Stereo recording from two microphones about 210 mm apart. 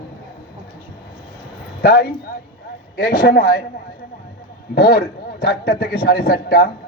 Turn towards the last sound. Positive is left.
turn(degrees=45)  # may be behind; listen again after turning